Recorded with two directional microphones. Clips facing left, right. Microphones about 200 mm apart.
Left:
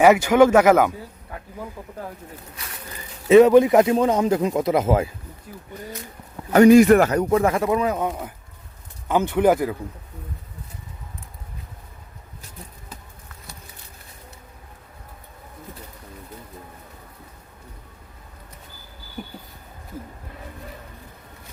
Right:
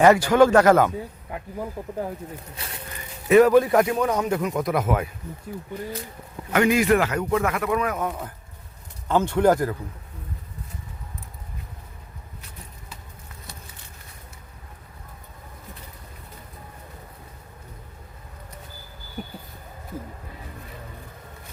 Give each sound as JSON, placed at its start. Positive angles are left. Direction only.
{"t": 0.0, "sound": "speech", "side_deg": 10}
{"t": 1.8, "sound": "speech", "side_deg": -20}
{"t": 2.6, "sound": "speech", "side_deg": -30}
{"t": 3.2, "sound": "speech", "side_deg": 25}
{"t": 6.5, "sound": "a man's voice", "side_deg": 40}